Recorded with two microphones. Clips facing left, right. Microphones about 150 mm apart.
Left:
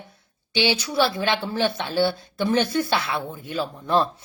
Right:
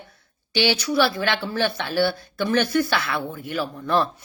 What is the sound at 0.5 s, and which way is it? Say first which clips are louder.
A woman's voice: right 1 dB; 20° left (ahead or behind).